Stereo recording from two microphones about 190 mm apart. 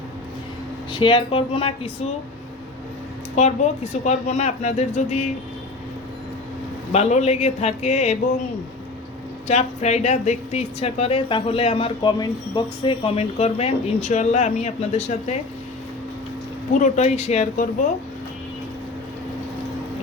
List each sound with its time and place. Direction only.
0.9 s speech: 25° left (ahead or behind)
3.3 s a woman's voice: 40° left (ahead or behind)
6.9 s a woman's voice: 35° left (ahead or behind)
9.5 s a woman's voice: 35° left (ahead or behind)
16.8 s a woman's voice: 35° left (ahead or behind)